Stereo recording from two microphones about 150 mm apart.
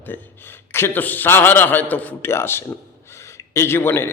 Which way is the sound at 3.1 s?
20° left (ahead or behind).